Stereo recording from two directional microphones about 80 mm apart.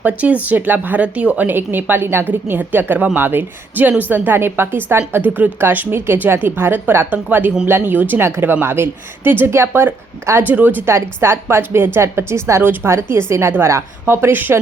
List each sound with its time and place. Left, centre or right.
0.0 s a woman's voice: centre
10.9 s a woman's voice: right